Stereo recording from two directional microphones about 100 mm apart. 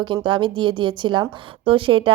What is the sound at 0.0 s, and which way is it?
A woman's voice, 55° right (ahead or behind).